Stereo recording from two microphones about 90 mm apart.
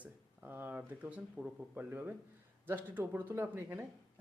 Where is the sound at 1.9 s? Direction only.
20° right (ahead or behind).